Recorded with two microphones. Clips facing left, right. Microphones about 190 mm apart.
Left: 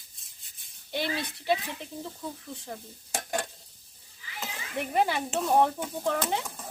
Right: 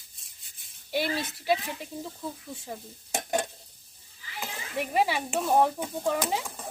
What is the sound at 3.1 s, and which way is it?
Stir, 20° right (ahead or behind).